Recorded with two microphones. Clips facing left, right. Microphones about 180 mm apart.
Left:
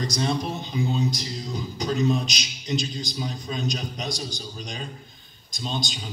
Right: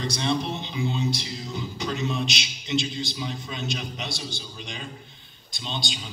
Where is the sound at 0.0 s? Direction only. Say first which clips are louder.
Even; 40° left (ahead or behind).